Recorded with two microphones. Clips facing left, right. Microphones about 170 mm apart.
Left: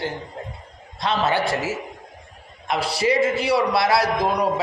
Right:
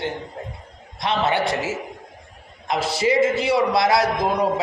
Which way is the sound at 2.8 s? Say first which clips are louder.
Right 1 dB; 25° right (ahead or behind).